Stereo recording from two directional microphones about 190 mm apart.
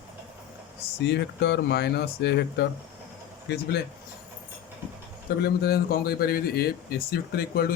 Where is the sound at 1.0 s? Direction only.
65° left (ahead or behind).